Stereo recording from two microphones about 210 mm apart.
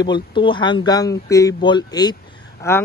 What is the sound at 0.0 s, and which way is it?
Speech, 20° left (ahead or behind).